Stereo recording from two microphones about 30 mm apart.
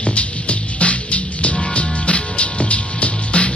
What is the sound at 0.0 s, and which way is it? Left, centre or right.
Music, left.